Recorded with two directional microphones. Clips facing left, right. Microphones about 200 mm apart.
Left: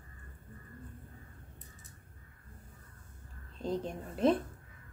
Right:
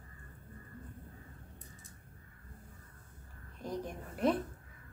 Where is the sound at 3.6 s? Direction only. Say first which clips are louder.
Left 4 dB; 25° left (ahead or behind).